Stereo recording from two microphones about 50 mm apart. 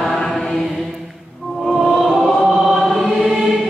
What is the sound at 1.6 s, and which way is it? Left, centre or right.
Music, centre.